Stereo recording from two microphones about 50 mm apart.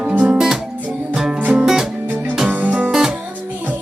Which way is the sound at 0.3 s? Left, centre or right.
Centre.